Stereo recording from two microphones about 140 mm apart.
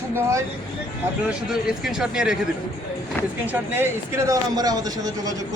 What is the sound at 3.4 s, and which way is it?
Speech, 15° right (ahead or behind).